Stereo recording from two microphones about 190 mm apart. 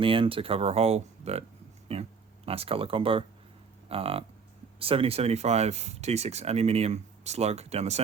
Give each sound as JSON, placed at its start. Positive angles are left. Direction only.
{"t": 0.0, "sound": "speech", "side_deg": -25}